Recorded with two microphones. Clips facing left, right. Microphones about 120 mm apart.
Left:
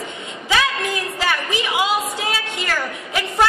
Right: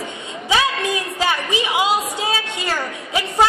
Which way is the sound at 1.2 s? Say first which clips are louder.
Right 2 dB; 20° right (ahead or behind).